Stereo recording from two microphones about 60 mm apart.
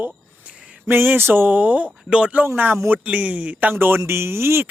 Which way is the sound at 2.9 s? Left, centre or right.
Right.